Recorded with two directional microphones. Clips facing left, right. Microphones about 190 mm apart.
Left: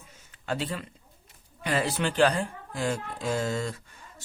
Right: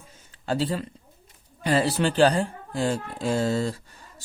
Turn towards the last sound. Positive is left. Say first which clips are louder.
# right 5 dB
turn(degrees=-35)  # may be behind; listen again after turning